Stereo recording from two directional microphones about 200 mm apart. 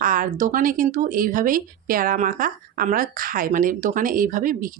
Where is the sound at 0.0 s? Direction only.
45° right (ahead or behind).